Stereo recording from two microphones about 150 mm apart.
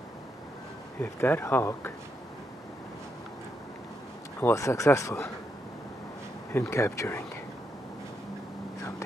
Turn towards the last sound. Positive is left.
turn(degrees=15)  # may be behind; listen again after turning